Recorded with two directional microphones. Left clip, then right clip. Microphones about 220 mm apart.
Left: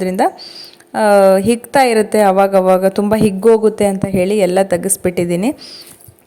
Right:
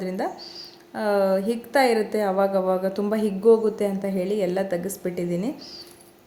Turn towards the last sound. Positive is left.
turn(degrees=40)  # may be behind; listen again after turning